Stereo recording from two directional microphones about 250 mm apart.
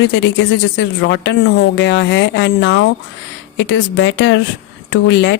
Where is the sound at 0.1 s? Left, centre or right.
Left.